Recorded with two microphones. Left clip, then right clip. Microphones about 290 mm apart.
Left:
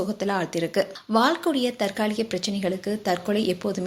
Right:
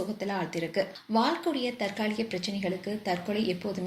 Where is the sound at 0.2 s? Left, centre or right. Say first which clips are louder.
Left 8 dB; left.